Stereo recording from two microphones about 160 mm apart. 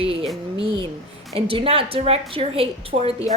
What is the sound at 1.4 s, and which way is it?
A woman's voice, 35° right (ahead or behind).